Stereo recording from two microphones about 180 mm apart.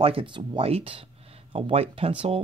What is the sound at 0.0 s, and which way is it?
Speech, 30° right (ahead or behind).